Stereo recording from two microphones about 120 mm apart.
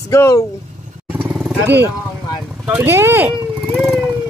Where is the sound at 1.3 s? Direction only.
5° right (ahead or behind).